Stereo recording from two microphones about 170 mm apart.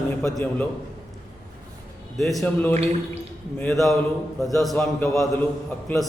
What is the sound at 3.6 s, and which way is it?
A man's voice, 5° left (ahead or behind).